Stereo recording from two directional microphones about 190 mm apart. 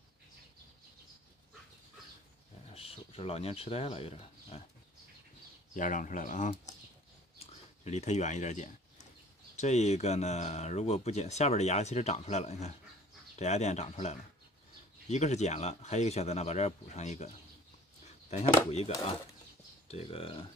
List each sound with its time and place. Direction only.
2.7 s speech: 30° left (ahead or behind)
5.8 s speech: 45° left (ahead or behind)
7.3 s a sound: 35° left (ahead or behind)
9.6 s speech: 35° left (ahead or behind)
18.7 s speech: 35° left (ahead or behind)